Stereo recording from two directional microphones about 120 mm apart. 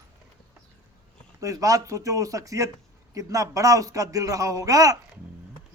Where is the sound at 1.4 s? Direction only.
25° right (ahead or behind).